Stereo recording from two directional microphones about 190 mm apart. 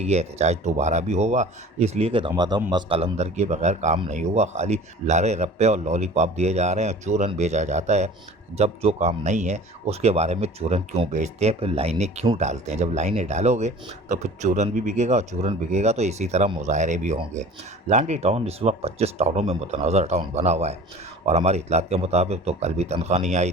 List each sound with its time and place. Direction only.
0.0 s speech: 35° right (ahead or behind)